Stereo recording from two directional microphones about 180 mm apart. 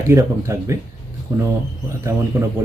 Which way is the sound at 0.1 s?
15° right (ahead or behind).